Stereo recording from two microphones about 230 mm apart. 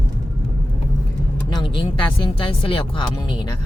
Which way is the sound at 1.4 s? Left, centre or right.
Centre.